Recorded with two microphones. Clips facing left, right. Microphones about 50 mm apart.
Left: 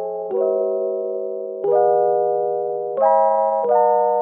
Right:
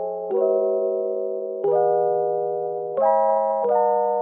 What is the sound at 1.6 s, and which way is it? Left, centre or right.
Music, centre.